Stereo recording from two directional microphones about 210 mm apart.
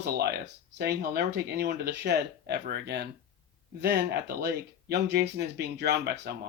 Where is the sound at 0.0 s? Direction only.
50° right (ahead or behind).